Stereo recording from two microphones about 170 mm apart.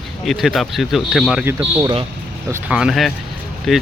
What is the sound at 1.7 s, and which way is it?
Speech, 30° right (ahead or behind).